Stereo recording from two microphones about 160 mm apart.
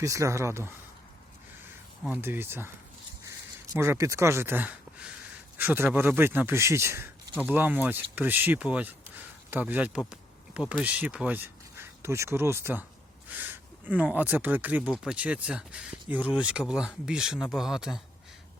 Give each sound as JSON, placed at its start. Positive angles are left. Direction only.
{"t": 0.0, "sound": "speech", "side_deg": -20}
{"t": 2.0, "sound": "speech", "side_deg": -15}